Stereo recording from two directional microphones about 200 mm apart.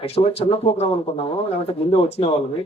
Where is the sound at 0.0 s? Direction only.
30° left (ahead or behind).